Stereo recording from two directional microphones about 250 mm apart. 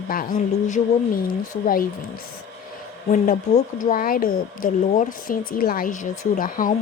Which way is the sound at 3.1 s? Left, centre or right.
Left.